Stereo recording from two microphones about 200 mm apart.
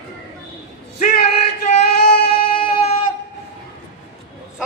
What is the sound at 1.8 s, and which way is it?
Child singing, 50° left (ahead or behind).